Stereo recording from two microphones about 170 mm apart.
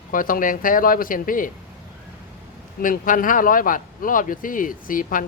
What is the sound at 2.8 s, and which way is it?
Speech, 55° left (ahead or behind).